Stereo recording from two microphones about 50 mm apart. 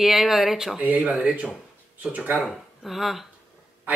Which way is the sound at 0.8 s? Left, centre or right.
Right.